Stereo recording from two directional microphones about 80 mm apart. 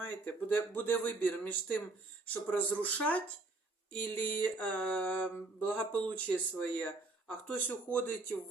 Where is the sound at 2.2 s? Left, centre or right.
Centre.